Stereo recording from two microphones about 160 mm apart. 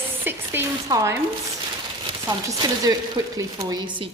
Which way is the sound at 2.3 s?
25° right (ahead or behind).